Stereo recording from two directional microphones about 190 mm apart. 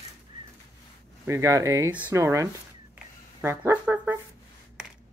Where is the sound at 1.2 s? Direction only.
15° right (ahead or behind).